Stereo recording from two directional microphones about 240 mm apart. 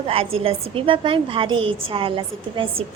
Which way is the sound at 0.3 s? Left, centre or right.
Right.